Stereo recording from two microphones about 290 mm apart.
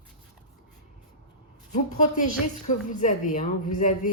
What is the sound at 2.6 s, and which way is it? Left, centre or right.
A woman's voice, left.